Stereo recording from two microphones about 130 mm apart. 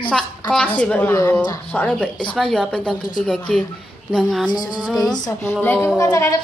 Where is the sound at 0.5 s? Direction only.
5° left (ahead or behind).